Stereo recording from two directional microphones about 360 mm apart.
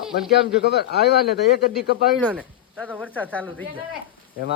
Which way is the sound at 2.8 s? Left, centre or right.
Centre.